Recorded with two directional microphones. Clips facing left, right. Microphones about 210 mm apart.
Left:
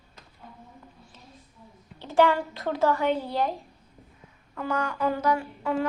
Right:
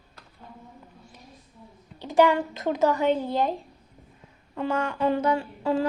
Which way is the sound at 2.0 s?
15° right (ahead or behind).